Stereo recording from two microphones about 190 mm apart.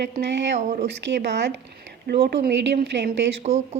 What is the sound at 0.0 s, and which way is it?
A woman's voice, 65° right (ahead or behind).